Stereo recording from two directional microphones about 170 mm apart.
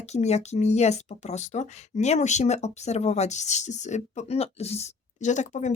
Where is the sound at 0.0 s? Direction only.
40° left (ahead or behind).